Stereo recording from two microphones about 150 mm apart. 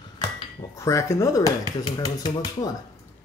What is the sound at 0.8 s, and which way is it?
Speech, 20° left (ahead or behind).